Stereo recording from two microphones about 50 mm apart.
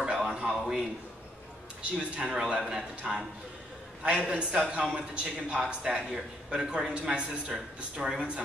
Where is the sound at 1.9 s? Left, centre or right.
Centre.